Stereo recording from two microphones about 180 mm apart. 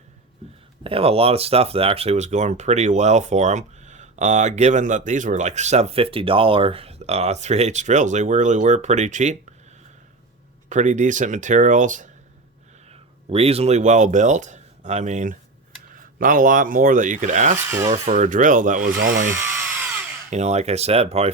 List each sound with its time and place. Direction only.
0.9 s speech: 35° right (ahead or behind)
10.7 s speech: 40° right (ahead or behind)
12.9 s speech: 35° right (ahead or behind)
17.6 s filing: 15° right (ahead or behind)
17.8 s speech: 40° right (ahead or behind)
19.3 s drill: 15° right (ahead or behind)
20.3 s speech: 40° right (ahead or behind)